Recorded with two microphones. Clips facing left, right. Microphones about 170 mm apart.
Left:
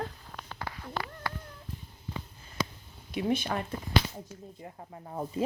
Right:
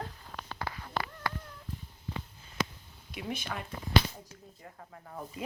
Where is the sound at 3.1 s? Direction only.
30° left (ahead or behind).